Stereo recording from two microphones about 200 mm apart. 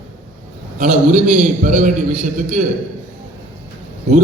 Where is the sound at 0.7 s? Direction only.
40° right (ahead or behind).